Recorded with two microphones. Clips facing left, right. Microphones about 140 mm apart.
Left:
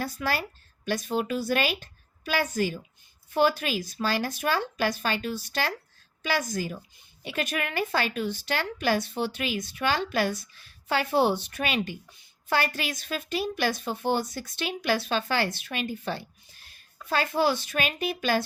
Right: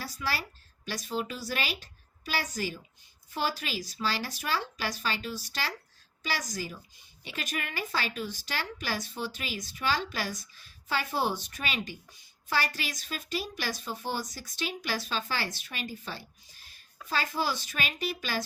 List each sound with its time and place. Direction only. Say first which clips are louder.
0.0 s a woman's voice: left 5 dB; 55° left (ahead or behind)